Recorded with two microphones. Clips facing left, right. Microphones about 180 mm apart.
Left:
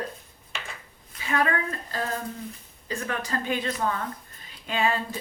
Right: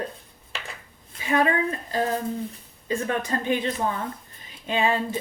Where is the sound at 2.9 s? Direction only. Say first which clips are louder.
Right 5 dB; 25° right (ahead or behind).